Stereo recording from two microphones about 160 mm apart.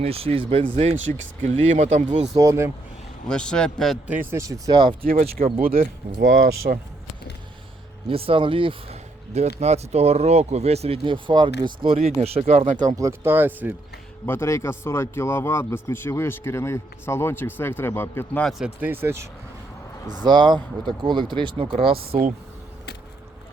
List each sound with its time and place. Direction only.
0.0 s speech: 35° right (ahead or behind)
1.4 s speech: 50° right (ahead or behind)
2.3 s speech: 20° right (ahead or behind)
3.2 s speech: 5° left (ahead or behind)
4.0 s speech: 10° right (ahead or behind); by 4.9 s 30° right (ahead or behind)
5.0 s speech: 65° right (ahead or behind)
8.0 s speech: 35° right (ahead or behind)
12.5 s speech: 55° right (ahead or behind)
12.9 s speech: 20° right (ahead or behind)
14.3 s a man's voice: 15° left (ahead or behind)
18.4 s speech: 5° right (ahead or behind)
20.2 s speech: 30° right (ahead or behind)
22.0 s speech: 70° right (ahead or behind)